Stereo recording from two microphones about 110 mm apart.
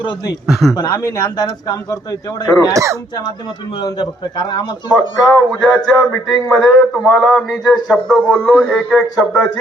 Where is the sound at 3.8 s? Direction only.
45° left (ahead or behind).